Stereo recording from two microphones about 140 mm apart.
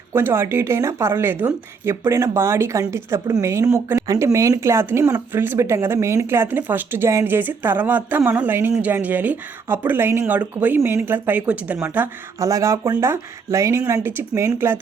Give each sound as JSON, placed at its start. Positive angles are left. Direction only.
{"t": 0.1, "sound": "speech", "side_deg": -15}